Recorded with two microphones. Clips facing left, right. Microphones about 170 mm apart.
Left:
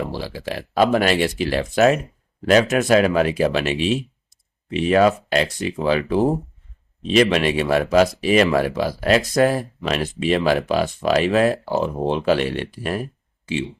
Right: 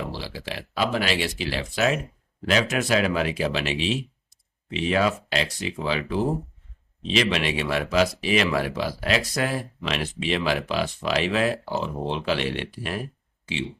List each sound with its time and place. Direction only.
0.1 s speech: 45° left (ahead or behind)